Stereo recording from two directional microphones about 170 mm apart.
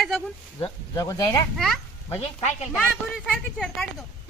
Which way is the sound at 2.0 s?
40° left (ahead or behind).